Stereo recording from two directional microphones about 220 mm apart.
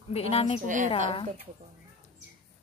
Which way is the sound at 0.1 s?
25° left (ahead or behind).